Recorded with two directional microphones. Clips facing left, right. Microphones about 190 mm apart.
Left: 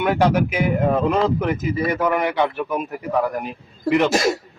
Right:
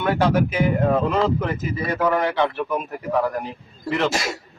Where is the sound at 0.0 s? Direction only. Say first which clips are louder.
Left 2 dB; 15° left (ahead or behind).